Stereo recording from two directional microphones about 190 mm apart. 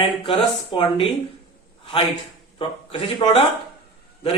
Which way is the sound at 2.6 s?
30° left (ahead or behind).